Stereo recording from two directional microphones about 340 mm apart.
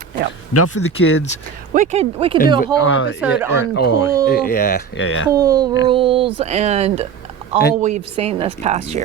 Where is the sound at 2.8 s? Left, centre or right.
Left.